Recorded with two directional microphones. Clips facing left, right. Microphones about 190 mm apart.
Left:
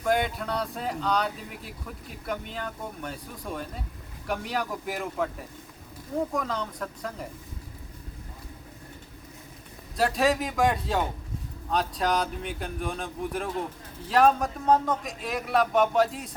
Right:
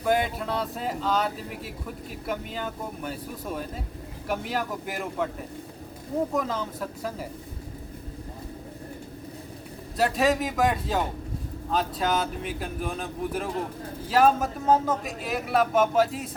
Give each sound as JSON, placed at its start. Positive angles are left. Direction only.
{"t": 0.0, "sound": "speech", "side_deg": 0}
{"t": 6.3, "sound": "speech", "side_deg": -5}
{"t": 10.0, "sound": "speech", "side_deg": 0}